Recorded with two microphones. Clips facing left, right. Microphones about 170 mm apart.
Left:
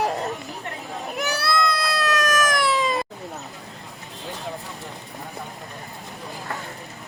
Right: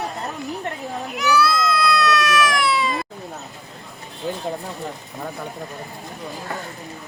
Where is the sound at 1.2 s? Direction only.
60° left (ahead or behind); by 3.1 s 40° left (ahead or behind).